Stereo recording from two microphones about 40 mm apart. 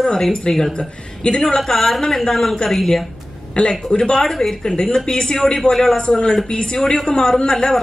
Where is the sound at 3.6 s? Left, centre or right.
Left.